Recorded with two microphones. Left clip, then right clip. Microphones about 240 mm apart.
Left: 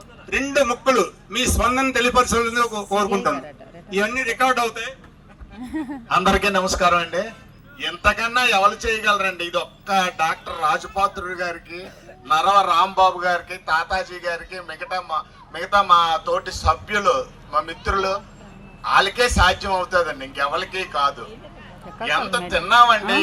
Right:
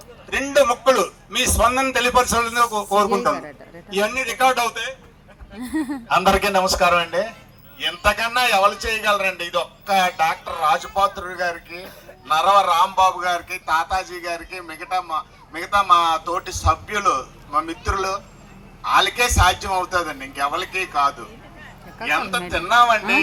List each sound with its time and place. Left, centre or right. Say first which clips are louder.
0.3 s a man's voice: right 2 dB; centre
5.7 s a man's voice: right 4 dB; centre
6.1 s a man's voice: right 1 dB; centre
13.0 s a man's voice: even; left
22.1 s a man's voice: even; left